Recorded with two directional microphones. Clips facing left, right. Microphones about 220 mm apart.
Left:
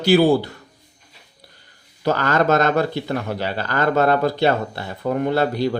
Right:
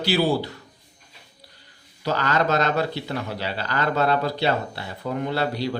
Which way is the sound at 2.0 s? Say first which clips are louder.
Left 5 dB; 50° left (ahead or behind).